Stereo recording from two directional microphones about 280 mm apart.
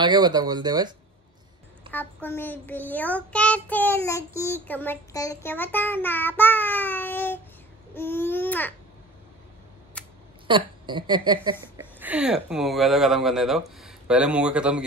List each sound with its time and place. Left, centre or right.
0.0 s speech: centre
1.9 s a child's voice: centre
10.0 s a sound: centre
10.4 s speech: centre
12.0 s speech: centre